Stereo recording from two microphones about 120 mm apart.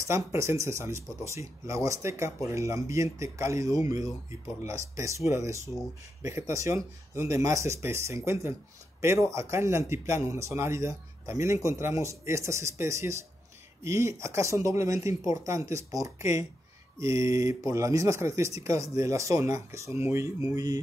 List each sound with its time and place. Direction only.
0.0 s speech: 25° right (ahead or behind)